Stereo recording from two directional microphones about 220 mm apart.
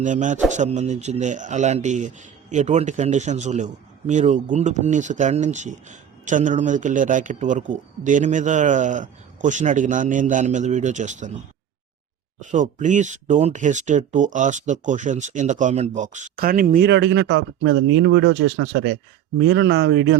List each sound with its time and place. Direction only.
0.0 s speech: 35° right (ahead or behind)
12.4 s speech: 35° right (ahead or behind); by 20.1 s 55° right (ahead or behind)